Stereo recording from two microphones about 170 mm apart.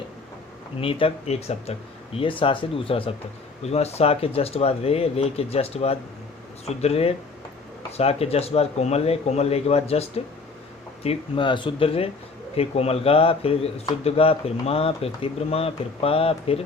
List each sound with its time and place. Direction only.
0.8 s speech: 35° left (ahead or behind)